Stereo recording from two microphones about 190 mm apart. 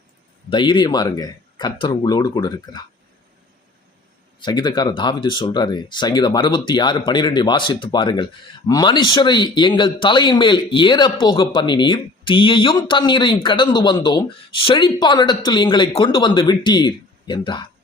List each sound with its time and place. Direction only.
0.5 s speech: 25° left (ahead or behind)
4.4 s speech: 20° left (ahead or behind)